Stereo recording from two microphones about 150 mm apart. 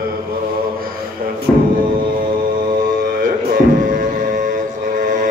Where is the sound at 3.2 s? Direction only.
65° right (ahead or behind).